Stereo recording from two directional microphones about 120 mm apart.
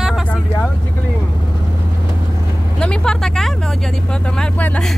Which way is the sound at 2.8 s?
5° left (ahead or behind).